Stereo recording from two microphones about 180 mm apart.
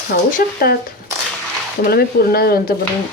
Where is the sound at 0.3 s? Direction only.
55° left (ahead or behind).